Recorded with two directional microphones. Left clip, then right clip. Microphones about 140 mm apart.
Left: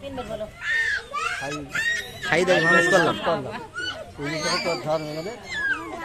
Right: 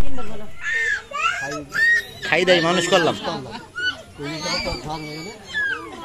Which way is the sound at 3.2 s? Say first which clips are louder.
Left 3 dB; 25° left (ahead or behind).